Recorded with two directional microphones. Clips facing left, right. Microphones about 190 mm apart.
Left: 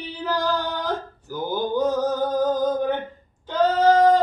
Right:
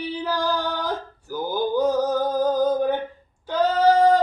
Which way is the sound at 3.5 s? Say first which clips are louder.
Left 1 dB; 10° right (ahead or behind).